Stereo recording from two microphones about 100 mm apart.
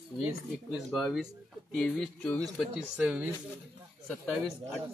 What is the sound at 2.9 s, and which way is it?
Speech, 10° right (ahead or behind).